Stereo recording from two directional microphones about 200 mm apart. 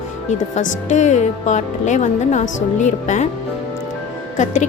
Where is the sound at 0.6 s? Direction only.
40° left (ahead or behind).